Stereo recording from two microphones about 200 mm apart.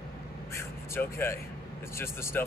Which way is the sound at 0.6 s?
15° left (ahead or behind).